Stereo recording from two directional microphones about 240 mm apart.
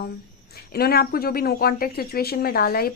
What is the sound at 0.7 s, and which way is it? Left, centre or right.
Speech, left.